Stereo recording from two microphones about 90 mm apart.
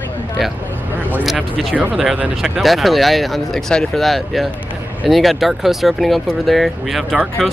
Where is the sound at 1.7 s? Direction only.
15° right (ahead or behind).